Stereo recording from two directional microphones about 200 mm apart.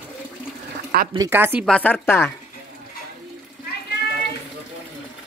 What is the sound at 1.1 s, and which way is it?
Speech, 15° right (ahead or behind).